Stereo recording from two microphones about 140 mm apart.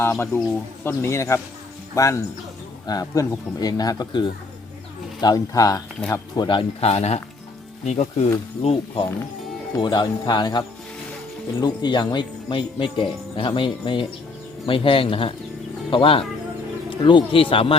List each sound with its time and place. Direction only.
0.0 s speech: 20° left (ahead or behind); by 8.3 s 55° left (ahead or behind)
8.6 s speech: 40° left (ahead or behind)
11.6 s speech: 30° left (ahead or behind)